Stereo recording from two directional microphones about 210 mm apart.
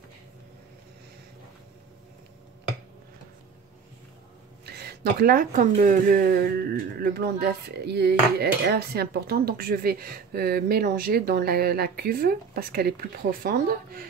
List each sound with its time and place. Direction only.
4.6 s speech: 50° right (ahead or behind)